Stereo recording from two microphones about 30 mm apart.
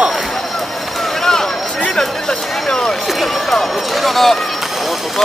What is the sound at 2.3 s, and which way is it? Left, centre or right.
Speech, centre.